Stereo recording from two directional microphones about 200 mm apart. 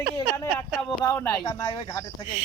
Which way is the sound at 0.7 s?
5° left (ahead or behind).